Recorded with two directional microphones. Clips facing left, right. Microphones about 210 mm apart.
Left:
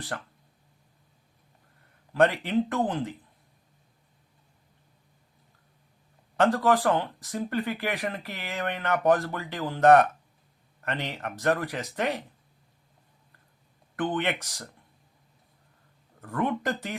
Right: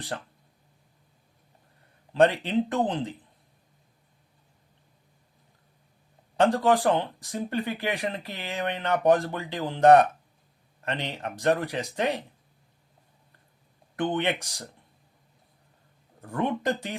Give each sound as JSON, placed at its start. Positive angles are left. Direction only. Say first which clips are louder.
{"t": 0.1, "sound": "speech", "louder": "right 1 dB", "side_deg": -20}
{"t": 2.1, "sound": "speech", "louder": "right 1 dB", "side_deg": -20}
{"t": 6.3, "sound": "speech", "louder": "right 1 dB", "side_deg": -15}
{"t": 14.1, "sound": "speech", "louder": "right 3 dB", "side_deg": -20}
{"t": 16.2, "sound": "speech", "louder": "right 1 dB", "side_deg": -15}